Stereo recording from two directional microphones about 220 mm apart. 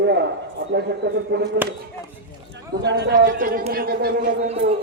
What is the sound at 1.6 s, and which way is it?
Speech, 10° right (ahead or behind).